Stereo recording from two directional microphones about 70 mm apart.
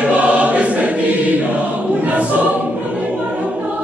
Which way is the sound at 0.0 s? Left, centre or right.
Centre.